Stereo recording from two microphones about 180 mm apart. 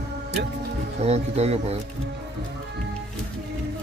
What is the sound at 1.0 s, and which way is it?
Speech, 35° right (ahead or behind).